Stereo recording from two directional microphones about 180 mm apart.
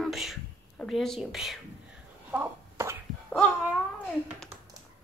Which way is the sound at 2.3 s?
10° right (ahead or behind).